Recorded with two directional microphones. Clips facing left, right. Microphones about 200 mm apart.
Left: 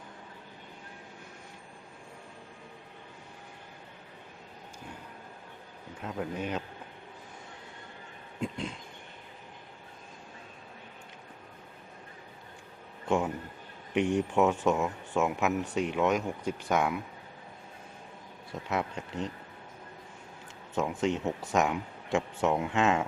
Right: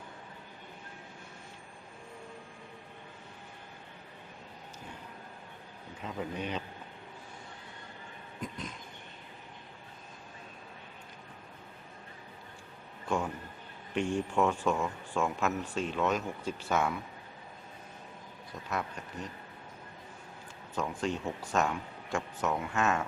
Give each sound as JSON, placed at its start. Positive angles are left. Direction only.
{"t": 6.1, "sound": "speech", "side_deg": 5}
{"t": 8.4, "sound": "a sound", "side_deg": 25}
{"t": 13.1, "sound": "a sound", "side_deg": 20}
{"t": 13.9, "sound": "speech", "side_deg": 15}
{"t": 18.7, "sound": "speech", "side_deg": 20}
{"t": 20.7, "sound": "speech", "side_deg": 20}